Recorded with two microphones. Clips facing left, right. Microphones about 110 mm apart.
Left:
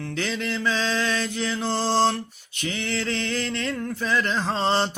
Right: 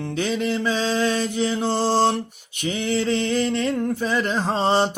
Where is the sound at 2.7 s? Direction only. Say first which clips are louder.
Right 6 dB; 10° right (ahead or behind).